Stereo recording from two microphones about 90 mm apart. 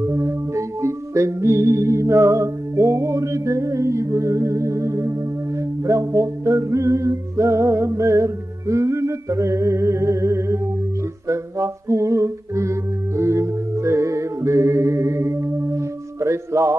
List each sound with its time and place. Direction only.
0.0 s music: 35° right (ahead or behind)